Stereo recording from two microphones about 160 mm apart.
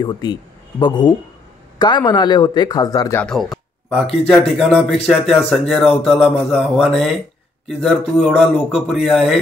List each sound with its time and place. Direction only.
0.0 s speech: 25° left (ahead or behind)
3.2 s a sound: 5° left (ahead or behind)
4.3 s a man's voice: centre (ahead or behind)